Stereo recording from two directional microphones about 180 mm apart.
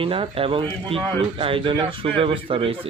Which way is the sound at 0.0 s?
30° right (ahead or behind).